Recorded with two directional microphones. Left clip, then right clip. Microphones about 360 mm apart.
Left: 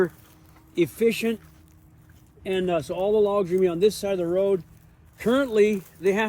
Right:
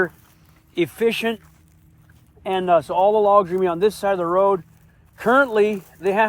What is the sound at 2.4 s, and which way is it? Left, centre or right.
Speech, centre.